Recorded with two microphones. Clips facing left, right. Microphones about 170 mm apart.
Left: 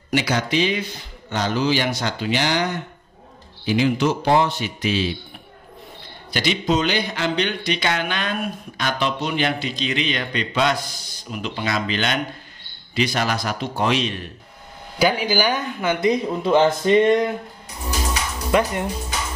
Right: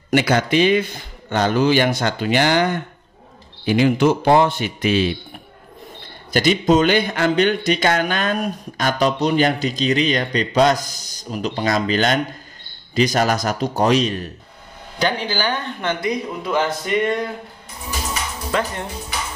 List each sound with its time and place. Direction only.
0.1 s speech: 55° right (ahead or behind)
6.3 s a man's voice: 45° right (ahead or behind)
15.0 s speech: 10° left (ahead or behind)
16.0 s speech: 25° left (ahead or behind)
18.5 s speech: 15° left (ahead or behind)